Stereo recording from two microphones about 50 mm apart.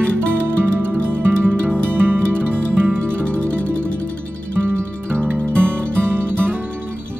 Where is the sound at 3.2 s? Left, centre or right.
Left.